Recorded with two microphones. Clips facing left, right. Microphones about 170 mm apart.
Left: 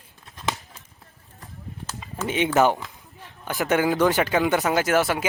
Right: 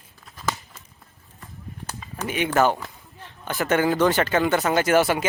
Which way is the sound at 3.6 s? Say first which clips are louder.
Even; 15° left (ahead or behind).